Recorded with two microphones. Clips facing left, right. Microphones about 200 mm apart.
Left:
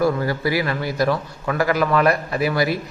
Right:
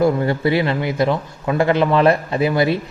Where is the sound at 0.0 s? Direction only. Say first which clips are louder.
Right 3 dB; 25° right (ahead or behind).